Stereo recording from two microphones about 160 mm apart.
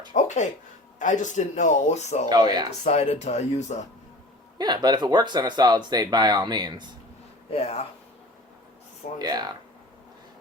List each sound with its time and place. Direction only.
0.1 s a sound: 50° left (ahead or behind)
0.9 s speech: 50° left (ahead or behind)
2.3 s speech: 25° right (ahead or behind)
2.6 s speech: 45° left (ahead or behind)
4.5 s speech: 25° right (ahead or behind)
7.5 s speech: 40° left (ahead or behind)
9.1 s speech: 25° right (ahead or behind)